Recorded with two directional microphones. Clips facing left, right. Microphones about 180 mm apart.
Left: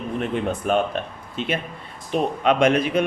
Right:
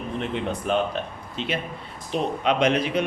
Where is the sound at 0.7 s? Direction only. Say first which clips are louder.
Left 2 dB; 50° left (ahead or behind).